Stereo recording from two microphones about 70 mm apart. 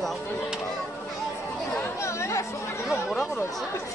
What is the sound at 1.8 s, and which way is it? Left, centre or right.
Chatter, left.